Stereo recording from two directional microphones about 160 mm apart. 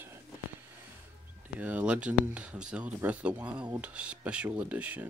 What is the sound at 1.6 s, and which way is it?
Speech, 10° right (ahead or behind).